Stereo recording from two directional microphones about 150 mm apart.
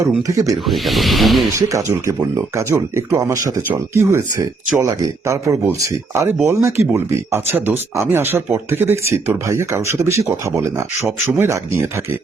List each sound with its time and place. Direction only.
0.2 s speech: 20° right (ahead or behind)
0.7 s speech: centre (ahead or behind)
1.5 s speech: 20° right (ahead or behind)